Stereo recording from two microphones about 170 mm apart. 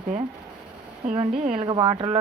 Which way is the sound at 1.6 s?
30° right (ahead or behind).